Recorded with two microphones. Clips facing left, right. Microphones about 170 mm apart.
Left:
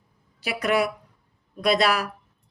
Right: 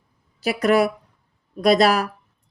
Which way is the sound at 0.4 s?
40° right (ahead or behind).